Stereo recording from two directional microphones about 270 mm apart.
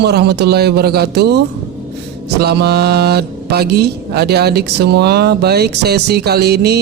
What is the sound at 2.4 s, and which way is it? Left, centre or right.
Speech, right.